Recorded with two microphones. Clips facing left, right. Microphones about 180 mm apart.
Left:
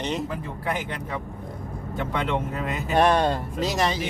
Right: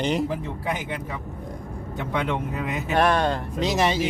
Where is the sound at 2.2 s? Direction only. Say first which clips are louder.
Right 1 dB; 10° right (ahead or behind).